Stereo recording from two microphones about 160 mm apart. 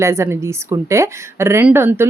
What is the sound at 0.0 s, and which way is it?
Speech, 15° right (ahead or behind).